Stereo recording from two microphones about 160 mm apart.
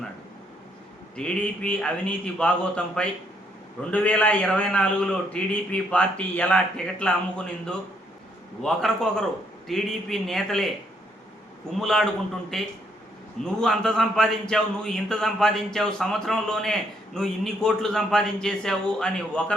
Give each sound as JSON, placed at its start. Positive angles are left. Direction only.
{"t": 1.1, "sound": "a man's voice", "side_deg": 5}
{"t": 11.7, "sound": "a man's voice", "side_deg": 0}